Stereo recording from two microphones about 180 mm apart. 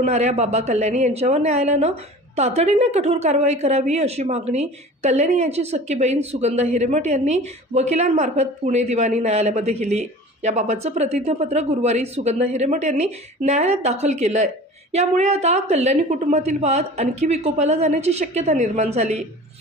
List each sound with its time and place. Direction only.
0.0 s a woman's voice: 40° right (ahead or behind)